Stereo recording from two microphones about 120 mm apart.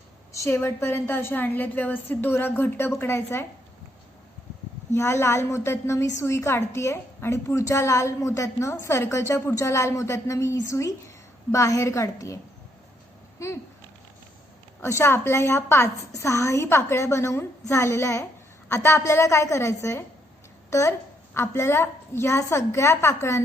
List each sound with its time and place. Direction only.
0.3 s a woman's voice: 20° left (ahead or behind)
4.9 s a woman's voice: 20° left (ahead or behind)
13.4 s a woman's voice: 25° left (ahead or behind)
14.8 s a woman's voice: 20° left (ahead or behind)